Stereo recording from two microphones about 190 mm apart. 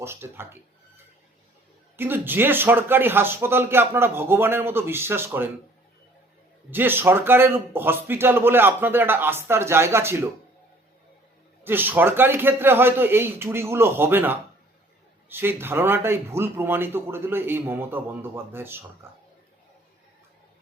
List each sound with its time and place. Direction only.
0.0 s speech: 10° right (ahead or behind)
2.0 s speech: 10° right (ahead or behind)
6.7 s speech: 10° right (ahead or behind)
11.6 s speech: 10° right (ahead or behind)